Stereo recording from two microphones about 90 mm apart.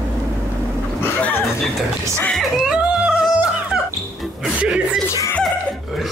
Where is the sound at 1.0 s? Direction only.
20° left (ahead or behind).